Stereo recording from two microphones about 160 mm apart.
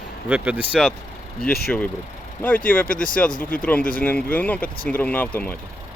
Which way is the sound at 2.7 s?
10° left (ahead or behind).